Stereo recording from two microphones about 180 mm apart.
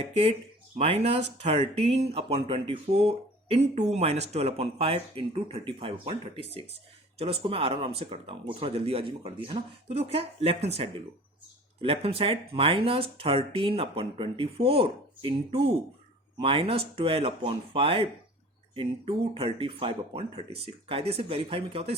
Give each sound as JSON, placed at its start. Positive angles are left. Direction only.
{"t": 0.0, "sound": "speech", "side_deg": -35}